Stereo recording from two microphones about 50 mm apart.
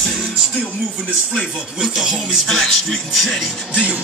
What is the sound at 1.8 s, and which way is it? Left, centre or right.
Music, centre.